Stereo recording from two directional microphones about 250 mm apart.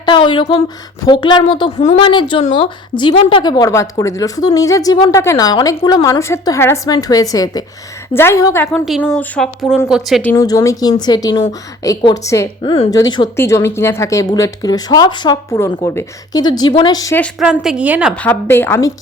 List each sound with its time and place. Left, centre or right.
0.0 s a woman's voice: centre
10.3 s a woman's voice: centre
17.4 s a woman's voice: centre
18.1 s a woman's voice: centre